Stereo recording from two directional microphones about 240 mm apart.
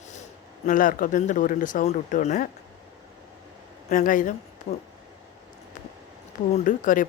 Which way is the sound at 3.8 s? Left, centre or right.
Left.